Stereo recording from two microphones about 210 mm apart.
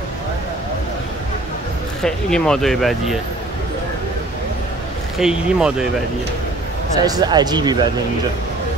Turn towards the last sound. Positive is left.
turn(degrees=-20)  # may be behind; listen again after turning